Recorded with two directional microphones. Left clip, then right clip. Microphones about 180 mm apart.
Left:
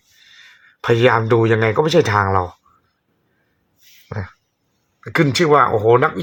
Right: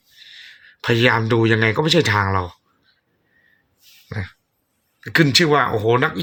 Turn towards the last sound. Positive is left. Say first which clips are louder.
# left 4 dB
turn(degrees=0)  # may be behind; listen again after turning